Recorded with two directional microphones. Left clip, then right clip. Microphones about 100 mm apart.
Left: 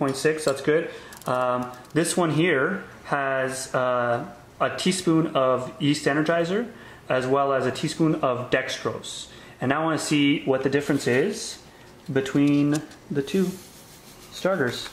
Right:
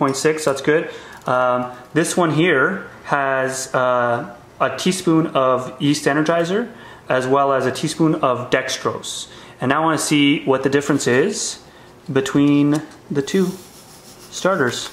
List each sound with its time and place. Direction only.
0.1 s speech: 15° right (ahead or behind)
14.4 s speech: 15° right (ahead or behind)